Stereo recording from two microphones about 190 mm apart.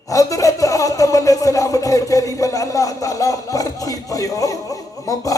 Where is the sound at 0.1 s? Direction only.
15° left (ahead or behind).